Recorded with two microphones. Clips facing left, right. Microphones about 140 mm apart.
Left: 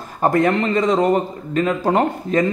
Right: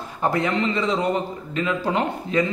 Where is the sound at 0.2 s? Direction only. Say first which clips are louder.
Left 5 dB; 50° left (ahead or behind).